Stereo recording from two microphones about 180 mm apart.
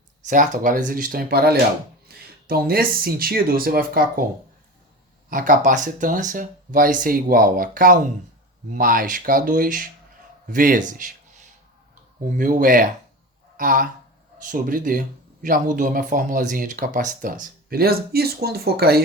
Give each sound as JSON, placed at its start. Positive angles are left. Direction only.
{"t": 0.3, "sound": "speech", "side_deg": -50}
{"t": 5.3, "sound": "speech", "side_deg": -50}
{"t": 12.4, "sound": "speech", "side_deg": -50}